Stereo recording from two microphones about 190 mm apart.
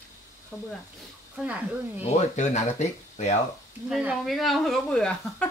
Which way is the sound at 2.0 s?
35° left (ahead or behind).